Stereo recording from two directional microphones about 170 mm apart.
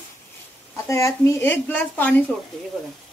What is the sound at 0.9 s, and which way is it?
Speech, 15° left (ahead or behind).